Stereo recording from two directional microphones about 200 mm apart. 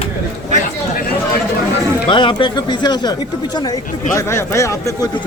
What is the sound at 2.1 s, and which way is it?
Speech, 25° left (ahead or behind).